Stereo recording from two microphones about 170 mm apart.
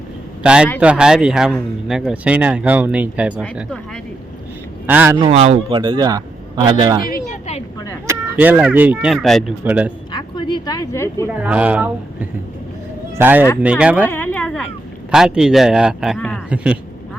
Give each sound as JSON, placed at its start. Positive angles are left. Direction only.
{"t": 0.4, "sound": "speech", "side_deg": -5}
{"t": 5.2, "sound": "speech", "side_deg": -35}
{"t": 5.8, "sound": "speech", "side_deg": -25}
{"t": 8.0, "sound": "speech", "side_deg": -15}
{"t": 10.1, "sound": "speech", "side_deg": 30}
{"t": 11.3, "sound": "speech", "side_deg": -5}
{"t": 14.0, "sound": "a sound", "side_deg": 10}
{"t": 15.1, "sound": "speech", "side_deg": -5}